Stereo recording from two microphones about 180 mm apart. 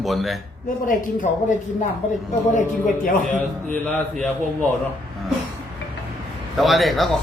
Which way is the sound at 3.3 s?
10° left (ahead or behind).